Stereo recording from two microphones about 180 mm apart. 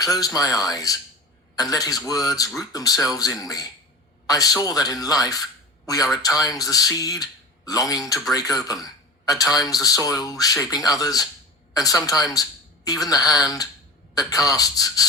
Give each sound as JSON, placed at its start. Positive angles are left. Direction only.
{"t": 0.0, "sound": "a woman's voice", "side_deg": 20}